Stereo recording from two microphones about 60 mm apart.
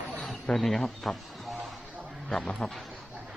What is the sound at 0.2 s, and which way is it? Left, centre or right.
Speech, centre.